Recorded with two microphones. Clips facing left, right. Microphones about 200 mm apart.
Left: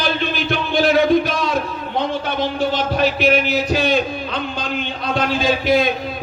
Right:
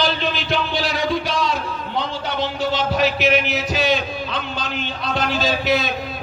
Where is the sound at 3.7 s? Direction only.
50° left (ahead or behind).